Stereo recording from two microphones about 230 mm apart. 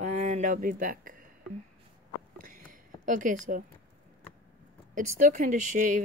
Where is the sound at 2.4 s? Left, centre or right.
Right.